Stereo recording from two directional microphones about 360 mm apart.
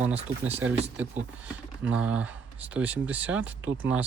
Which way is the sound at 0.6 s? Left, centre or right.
Centre.